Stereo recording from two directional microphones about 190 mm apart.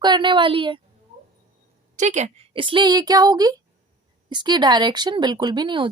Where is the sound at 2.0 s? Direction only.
40° right (ahead or behind).